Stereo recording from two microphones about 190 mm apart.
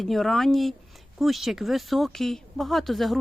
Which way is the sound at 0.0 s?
Centre (ahead or behind).